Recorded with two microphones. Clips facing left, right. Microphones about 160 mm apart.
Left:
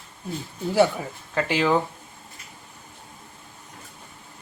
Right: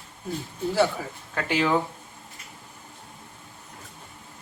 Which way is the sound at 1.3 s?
Centre (ahead or behind).